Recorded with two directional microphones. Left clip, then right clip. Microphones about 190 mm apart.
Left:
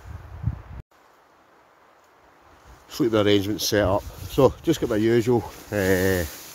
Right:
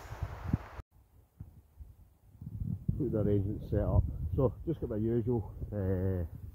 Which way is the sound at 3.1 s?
10° left (ahead or behind).